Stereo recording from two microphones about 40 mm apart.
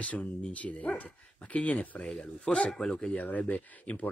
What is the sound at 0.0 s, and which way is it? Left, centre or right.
Speech, left.